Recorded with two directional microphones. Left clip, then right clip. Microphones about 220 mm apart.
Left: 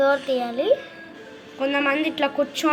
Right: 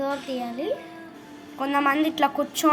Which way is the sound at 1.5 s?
30° right (ahead or behind).